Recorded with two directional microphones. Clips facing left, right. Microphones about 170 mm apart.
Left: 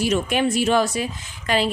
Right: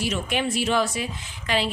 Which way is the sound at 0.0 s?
45° left (ahead or behind).